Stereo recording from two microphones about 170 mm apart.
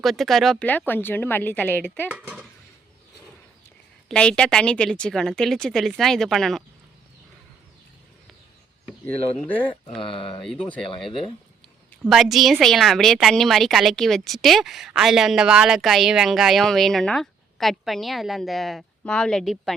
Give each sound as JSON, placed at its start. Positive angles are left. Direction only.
{"t": 0.0, "sound": "a woman's voice", "side_deg": 0}
{"t": 2.0, "sound": "speech", "side_deg": -10}
{"t": 4.1, "sound": "a woman's voice", "side_deg": 5}
{"t": 9.0, "sound": "a woman's voice", "side_deg": 10}
{"t": 10.0, "sound": "speech", "side_deg": 30}
{"t": 10.4, "sound": "a woman's voice", "side_deg": 5}